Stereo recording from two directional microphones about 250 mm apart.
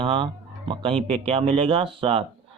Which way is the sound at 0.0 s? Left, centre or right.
Right.